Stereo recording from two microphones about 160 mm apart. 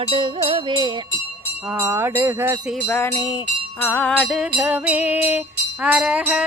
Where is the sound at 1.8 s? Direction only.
15° right (ahead or behind).